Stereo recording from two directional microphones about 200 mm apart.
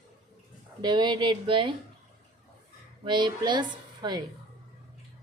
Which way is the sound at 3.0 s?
20° right (ahead or behind).